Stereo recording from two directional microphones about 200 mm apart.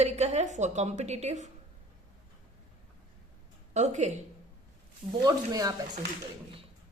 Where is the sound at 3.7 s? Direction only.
35° right (ahead or behind).